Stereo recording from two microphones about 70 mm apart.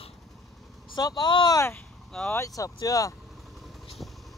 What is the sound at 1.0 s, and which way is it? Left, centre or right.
Speech, left.